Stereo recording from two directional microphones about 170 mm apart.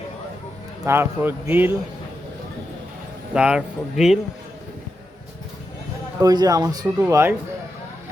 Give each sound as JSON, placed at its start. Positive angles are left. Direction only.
{"t": 0.9, "sound": "speech", "side_deg": -15}
{"t": 3.3, "sound": "speech", "side_deg": -5}
{"t": 6.1, "sound": "speech", "side_deg": -20}